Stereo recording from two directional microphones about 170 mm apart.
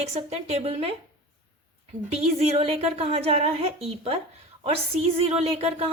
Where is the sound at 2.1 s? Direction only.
35° right (ahead or behind).